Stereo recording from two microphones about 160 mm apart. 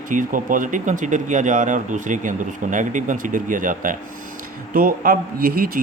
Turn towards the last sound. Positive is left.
turn(degrees=-65)  # may be behind; listen again after turning